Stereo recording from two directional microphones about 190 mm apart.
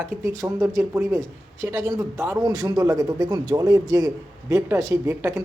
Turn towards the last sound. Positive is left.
turn(degrees=-15)  # may be behind; listen again after turning